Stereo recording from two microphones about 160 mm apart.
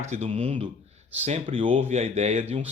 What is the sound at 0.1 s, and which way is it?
Speech, 40° right (ahead or behind).